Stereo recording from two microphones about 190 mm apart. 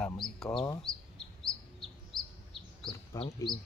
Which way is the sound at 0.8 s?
5° left (ahead or behind).